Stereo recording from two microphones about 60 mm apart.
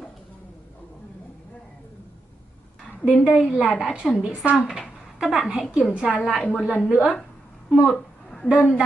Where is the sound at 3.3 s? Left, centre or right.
Centre.